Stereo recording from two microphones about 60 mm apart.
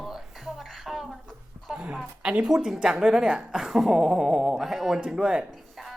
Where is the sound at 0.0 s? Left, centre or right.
Centre.